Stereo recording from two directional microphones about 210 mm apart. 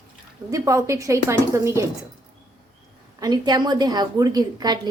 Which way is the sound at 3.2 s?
20° right (ahead or behind).